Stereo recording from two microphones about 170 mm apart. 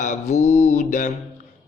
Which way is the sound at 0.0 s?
45° left (ahead or behind).